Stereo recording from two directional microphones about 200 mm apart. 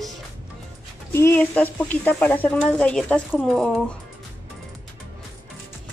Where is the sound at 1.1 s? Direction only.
10° left (ahead or behind).